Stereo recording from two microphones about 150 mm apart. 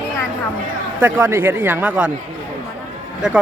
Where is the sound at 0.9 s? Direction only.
15° right (ahead or behind).